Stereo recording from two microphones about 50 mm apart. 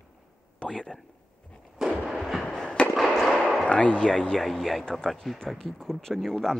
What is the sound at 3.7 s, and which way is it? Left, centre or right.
Speech, left.